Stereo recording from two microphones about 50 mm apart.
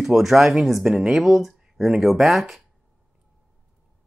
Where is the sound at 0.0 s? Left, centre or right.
Centre.